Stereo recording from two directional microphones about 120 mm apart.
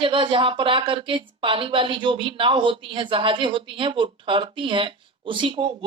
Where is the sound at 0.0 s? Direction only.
45° right (ahead or behind).